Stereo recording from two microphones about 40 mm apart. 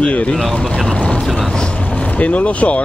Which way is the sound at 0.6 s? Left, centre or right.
Centre.